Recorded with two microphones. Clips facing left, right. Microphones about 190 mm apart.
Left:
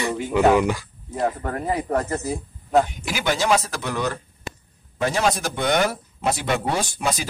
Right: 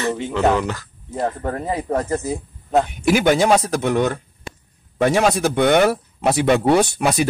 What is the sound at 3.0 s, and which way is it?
Speech, 55° right (ahead or behind).